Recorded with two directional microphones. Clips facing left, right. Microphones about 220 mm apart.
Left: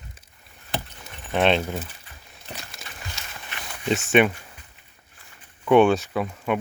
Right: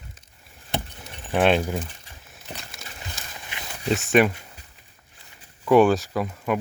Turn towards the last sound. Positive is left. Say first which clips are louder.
# even
turn(degrees=0)  # may be behind; listen again after turning